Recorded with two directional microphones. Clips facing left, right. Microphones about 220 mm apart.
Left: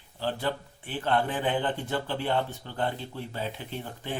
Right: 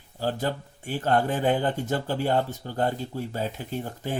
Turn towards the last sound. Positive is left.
turn(degrees=-40)  # may be behind; listen again after turning